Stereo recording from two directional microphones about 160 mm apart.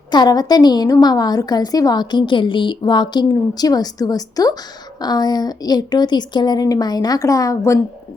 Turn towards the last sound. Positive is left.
turn(degrees=20)  # may be behind; listen again after turning